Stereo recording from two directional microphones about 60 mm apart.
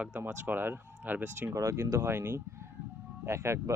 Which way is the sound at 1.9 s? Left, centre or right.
Right.